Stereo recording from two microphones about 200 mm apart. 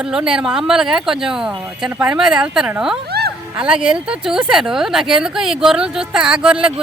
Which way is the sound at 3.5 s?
5° right (ahead or behind).